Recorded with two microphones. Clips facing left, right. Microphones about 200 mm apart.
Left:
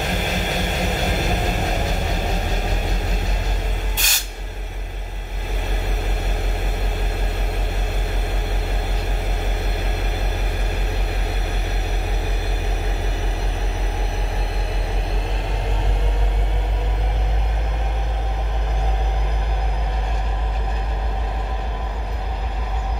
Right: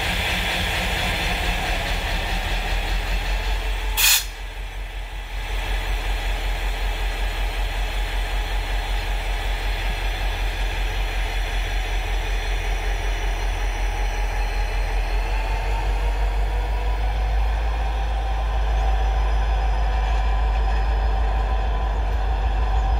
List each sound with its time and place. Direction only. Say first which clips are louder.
0.0 s vehicle: left 5 dB; 45° left (ahead or behind)
4.0 s spray: left 1 dB; 45° left (ahead or behind)